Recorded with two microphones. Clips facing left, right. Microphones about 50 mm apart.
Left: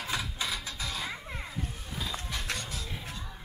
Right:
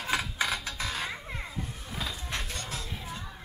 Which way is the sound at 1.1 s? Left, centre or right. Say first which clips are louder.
Right 1 dB; centre.